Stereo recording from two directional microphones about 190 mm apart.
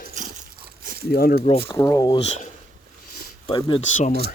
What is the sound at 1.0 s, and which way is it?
Speech, 50° left (ahead or behind).